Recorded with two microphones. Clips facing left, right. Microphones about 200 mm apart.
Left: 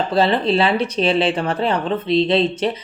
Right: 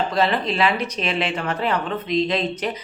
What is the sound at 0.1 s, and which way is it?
A woman's voice, 30° left (ahead or behind).